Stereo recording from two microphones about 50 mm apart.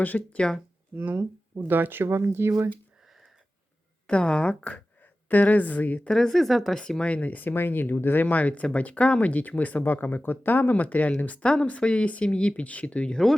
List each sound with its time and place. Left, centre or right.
0.1 s speech: centre
0.9 s speech: right
4.0 s speech: left
6.1 s speech: centre
6.8 s speech: left